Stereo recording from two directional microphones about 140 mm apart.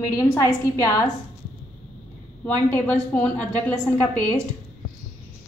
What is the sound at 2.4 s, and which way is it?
A woman's voice, 10° left (ahead or behind).